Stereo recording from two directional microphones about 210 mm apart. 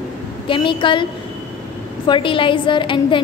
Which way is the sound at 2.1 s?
25° left (ahead or behind).